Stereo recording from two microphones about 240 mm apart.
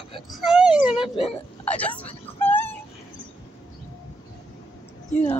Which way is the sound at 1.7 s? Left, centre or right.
Centre.